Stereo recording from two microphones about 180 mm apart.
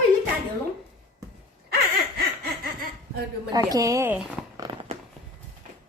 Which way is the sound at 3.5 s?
20° right (ahead or behind).